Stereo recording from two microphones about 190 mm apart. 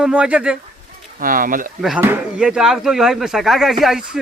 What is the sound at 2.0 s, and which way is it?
Speech, 10° right (ahead or behind).